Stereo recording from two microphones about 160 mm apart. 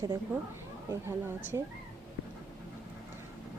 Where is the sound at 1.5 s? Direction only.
20° right (ahead or behind).